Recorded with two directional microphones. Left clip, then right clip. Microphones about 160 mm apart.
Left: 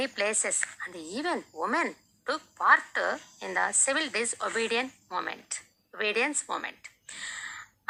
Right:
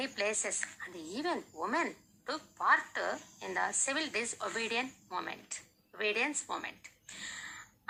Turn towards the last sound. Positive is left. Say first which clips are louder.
# left 6 dB
turn(degrees=25)  # may be behind; listen again after turning